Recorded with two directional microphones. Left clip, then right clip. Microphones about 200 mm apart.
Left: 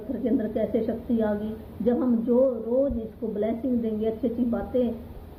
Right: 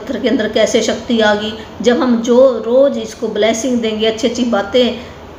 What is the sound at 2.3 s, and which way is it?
Speech, 25° right (ahead or behind).